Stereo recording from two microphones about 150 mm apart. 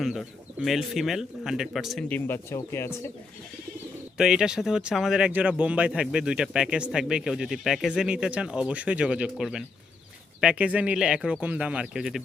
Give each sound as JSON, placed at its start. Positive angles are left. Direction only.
{"t": 0.0, "sound": "speech", "side_deg": 0}
{"t": 2.0, "sound": "speech", "side_deg": 15}
{"t": 4.2, "sound": "speech", "side_deg": -5}